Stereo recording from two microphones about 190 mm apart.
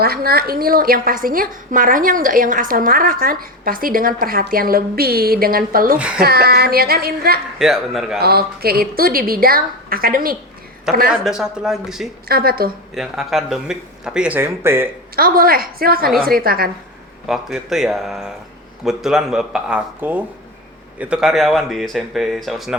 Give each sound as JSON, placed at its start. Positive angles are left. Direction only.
{"t": 0.0, "sound": "a woman's voice", "side_deg": -50}
{"t": 7.6, "sound": "speech", "side_deg": 0}
{"t": 8.2, "sound": "a woman's voice", "side_deg": -55}
{"t": 11.1, "sound": "speech", "side_deg": -5}
{"t": 12.3, "sound": "a woman's voice", "side_deg": -50}
{"t": 12.9, "sound": "speech", "side_deg": 0}
{"t": 15.1, "sound": "a woman's voice", "side_deg": -50}
{"t": 17.2, "sound": "speech", "side_deg": 0}